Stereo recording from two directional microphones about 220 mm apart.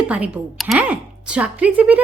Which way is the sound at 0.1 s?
5° right (ahead or behind).